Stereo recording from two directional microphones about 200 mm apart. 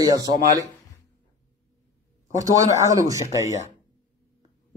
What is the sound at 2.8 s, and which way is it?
Speech, 15° right (ahead or behind).